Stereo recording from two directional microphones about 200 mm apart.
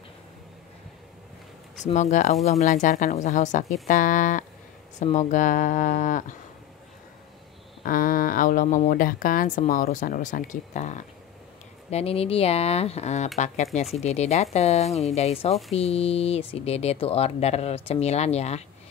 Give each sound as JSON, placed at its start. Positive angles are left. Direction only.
{"t": 1.9, "sound": "speech", "side_deg": 35}
{"t": 7.8, "sound": "speech", "side_deg": 45}